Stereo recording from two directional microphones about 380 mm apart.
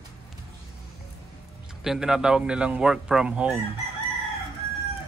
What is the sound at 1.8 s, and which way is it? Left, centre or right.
A man's voice, centre.